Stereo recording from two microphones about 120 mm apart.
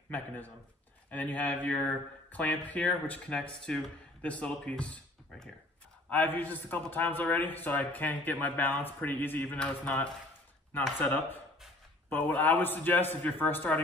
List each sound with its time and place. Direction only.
1.1 s a man's voice: 15° left (ahead or behind)